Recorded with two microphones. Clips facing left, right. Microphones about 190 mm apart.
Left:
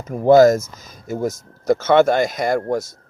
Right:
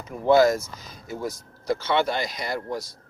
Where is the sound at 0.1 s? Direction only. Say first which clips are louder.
Left 7 dB; 45° left (ahead or behind).